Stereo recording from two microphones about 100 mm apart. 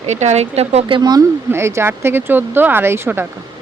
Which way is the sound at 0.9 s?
45° right (ahead or behind).